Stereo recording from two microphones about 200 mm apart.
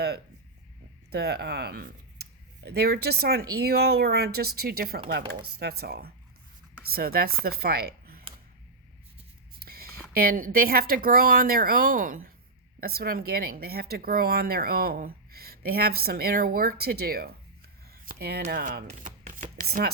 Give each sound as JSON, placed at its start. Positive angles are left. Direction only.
{"t": 1.1, "sound": "speech", "side_deg": -55}
{"t": 9.6, "sound": "speech", "side_deg": -50}
{"t": 18.0, "sound": "chopping", "side_deg": -50}